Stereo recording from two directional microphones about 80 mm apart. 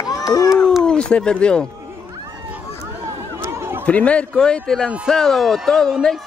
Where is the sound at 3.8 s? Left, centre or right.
Centre.